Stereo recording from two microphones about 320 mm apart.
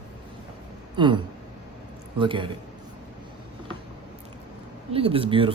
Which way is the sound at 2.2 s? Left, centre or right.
Centre.